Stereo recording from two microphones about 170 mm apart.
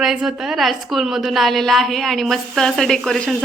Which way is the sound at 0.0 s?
Centre (ahead or behind).